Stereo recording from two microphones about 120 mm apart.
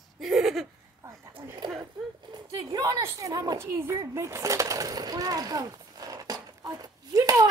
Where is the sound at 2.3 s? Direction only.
35° right (ahead or behind).